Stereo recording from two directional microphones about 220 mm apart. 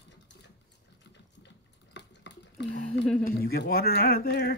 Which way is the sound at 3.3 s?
45° left (ahead or behind).